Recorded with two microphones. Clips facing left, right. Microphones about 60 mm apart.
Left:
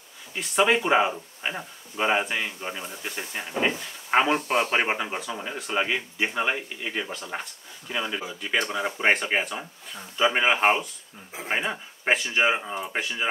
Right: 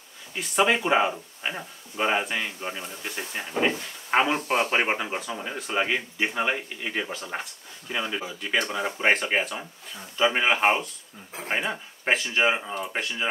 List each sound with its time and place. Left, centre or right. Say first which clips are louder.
0.4 s speech: left 1 dB; centre